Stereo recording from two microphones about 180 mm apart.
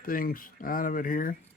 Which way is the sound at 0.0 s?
55° left (ahead or behind).